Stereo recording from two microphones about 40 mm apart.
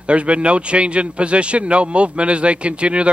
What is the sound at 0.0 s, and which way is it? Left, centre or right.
A man's voice, right.